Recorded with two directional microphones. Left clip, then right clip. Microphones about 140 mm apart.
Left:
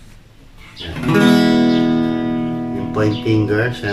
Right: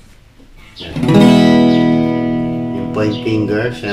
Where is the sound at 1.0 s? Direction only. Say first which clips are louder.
Right 4 dB; 25° right (ahead or behind).